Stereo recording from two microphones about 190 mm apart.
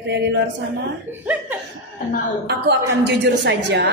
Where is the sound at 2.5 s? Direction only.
65° right (ahead or behind).